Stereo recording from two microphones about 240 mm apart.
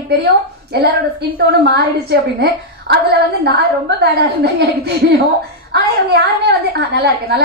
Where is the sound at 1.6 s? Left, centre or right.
Right.